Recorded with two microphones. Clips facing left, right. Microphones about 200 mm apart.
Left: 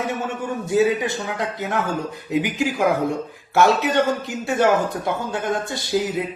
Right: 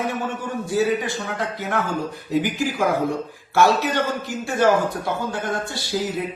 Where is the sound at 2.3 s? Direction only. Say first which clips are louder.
Even; 20° left (ahead or behind).